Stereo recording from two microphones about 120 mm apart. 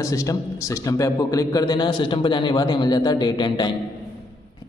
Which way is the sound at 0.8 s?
30° left (ahead or behind).